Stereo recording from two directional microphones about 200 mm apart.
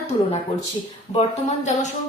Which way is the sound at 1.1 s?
30° left (ahead or behind).